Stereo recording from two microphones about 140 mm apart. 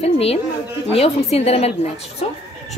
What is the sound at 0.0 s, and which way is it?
A woman's voice, 45° left (ahead or behind).